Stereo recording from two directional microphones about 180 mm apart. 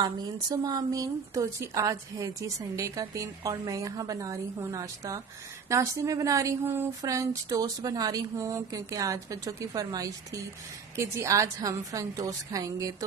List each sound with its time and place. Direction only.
0.0 s a woman's voice: 25° right (ahead or behind)